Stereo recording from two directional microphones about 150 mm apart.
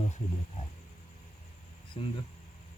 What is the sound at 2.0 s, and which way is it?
Speech, 35° left (ahead or behind).